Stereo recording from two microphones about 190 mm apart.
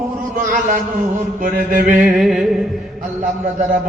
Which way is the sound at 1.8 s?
10° right (ahead or behind).